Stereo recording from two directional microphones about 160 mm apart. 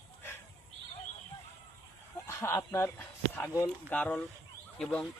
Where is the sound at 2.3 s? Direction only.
15° left (ahead or behind).